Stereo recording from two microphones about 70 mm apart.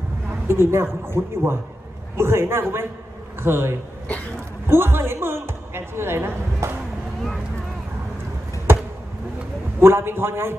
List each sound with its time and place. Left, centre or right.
0.5 s a woman's voice: right
9.8 s speech: right